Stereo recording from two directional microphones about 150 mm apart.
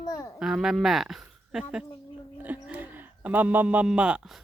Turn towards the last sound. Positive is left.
turn(degrees=-5)  # may be behind; listen again after turning